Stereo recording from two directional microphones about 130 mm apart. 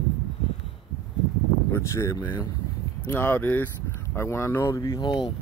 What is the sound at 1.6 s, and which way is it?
Speech, 20° left (ahead or behind).